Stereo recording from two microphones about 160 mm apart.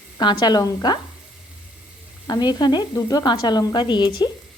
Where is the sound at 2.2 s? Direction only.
25° left (ahead or behind).